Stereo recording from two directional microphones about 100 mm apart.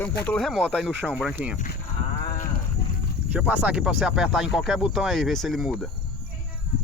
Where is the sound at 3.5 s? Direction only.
15° right (ahead or behind).